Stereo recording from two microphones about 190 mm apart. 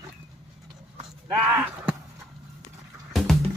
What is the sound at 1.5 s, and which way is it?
Speech, 10° right (ahead or behind).